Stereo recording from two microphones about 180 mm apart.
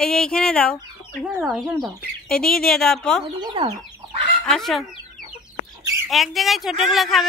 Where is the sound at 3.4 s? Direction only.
30° right (ahead or behind).